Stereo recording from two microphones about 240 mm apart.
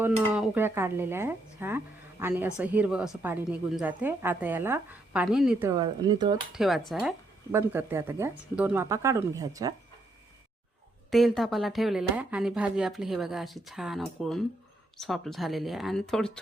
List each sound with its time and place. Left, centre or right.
0.0 s a woman's voice: centre
6.5 s a woman's voice: centre
11.1 s speech: centre